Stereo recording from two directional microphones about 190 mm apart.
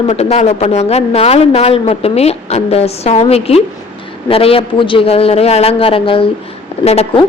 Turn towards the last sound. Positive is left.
turn(degrees=35)  # may be behind; listen again after turning